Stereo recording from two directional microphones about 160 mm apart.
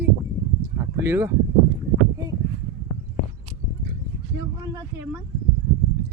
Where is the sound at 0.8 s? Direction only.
15° right (ahead or behind).